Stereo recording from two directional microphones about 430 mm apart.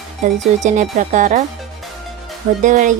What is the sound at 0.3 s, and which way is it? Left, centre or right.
Speech, centre.